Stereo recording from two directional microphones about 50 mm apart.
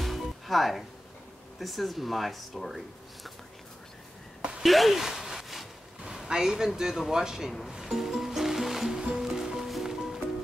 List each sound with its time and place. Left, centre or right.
0.0 s music: centre
1.6 s speech: centre
4.4 s a sound: centre
4.6 s a sound: centre
6.0 s speech: centre
7.7 s music: centre